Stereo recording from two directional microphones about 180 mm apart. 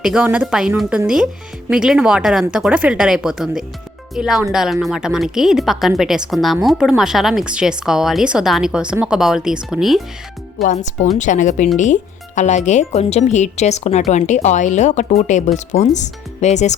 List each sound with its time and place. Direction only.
0.0 s a woman's voice: 5° right (ahead or behind)
10.6 s speech: 40° left (ahead or behind)